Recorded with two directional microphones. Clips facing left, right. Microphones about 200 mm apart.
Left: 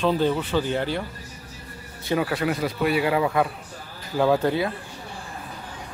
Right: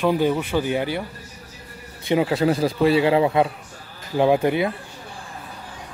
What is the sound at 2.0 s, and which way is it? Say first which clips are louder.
Speech: right 5 dB; 20° right (ahead or behind).